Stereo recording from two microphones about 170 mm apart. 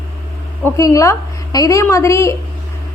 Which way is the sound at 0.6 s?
20° left (ahead or behind).